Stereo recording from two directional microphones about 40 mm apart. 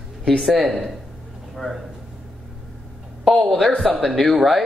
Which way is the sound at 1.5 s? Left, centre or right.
Centre.